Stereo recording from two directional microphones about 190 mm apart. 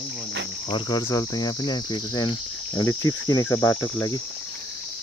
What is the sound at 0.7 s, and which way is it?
Cricket, 25° left (ahead or behind).